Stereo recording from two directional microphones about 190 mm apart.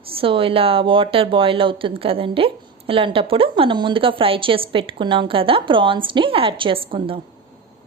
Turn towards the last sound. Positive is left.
turn(degrees=-30)  # may be behind; listen again after turning